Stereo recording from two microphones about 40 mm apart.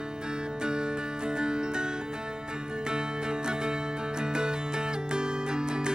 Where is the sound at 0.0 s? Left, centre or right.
Right.